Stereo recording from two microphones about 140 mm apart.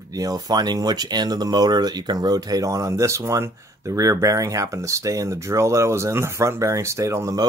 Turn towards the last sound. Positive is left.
turn(degrees=-20)  # may be behind; listen again after turning